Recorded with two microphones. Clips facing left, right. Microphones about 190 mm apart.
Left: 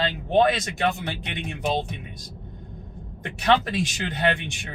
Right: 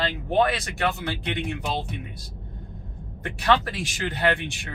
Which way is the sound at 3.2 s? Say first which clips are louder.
Left 1 dB; 20° left (ahead or behind).